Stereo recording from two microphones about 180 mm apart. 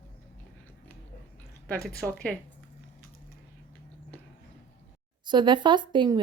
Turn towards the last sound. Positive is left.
turn(degrees=-25)  # may be behind; listen again after turning